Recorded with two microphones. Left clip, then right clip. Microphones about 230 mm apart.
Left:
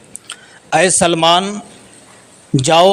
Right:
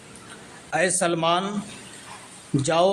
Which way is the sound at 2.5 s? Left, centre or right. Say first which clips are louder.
Left 10 dB; left.